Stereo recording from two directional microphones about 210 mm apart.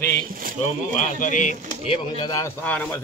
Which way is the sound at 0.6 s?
35° left (ahead or behind).